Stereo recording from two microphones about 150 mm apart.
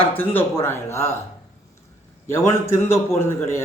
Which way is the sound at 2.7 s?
15° left (ahead or behind).